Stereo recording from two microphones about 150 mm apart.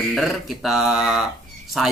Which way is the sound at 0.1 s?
Centre (ahead or behind).